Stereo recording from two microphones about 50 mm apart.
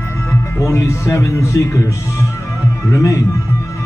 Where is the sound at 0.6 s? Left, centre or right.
Left.